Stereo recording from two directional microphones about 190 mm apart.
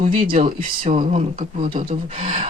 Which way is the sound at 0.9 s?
45° right (ahead or behind).